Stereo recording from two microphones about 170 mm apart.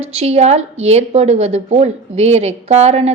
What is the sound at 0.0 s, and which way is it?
A woman's voice, 35° right (ahead or behind).